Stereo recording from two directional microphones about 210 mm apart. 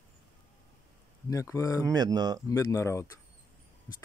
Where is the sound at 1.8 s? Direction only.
20° right (ahead or behind).